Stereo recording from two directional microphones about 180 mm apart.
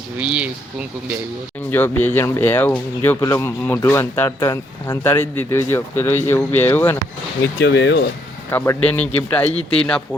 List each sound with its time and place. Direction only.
0.2 s speech: 5° right (ahead or behind)
1.7 s speech: 10° left (ahead or behind)
7.6 s speech: 80° left
8.4 s speech: 15° left (ahead or behind)